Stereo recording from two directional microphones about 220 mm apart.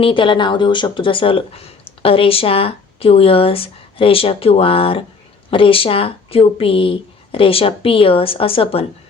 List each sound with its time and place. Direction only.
0.0 s a woman's voice: 20° left (ahead or behind)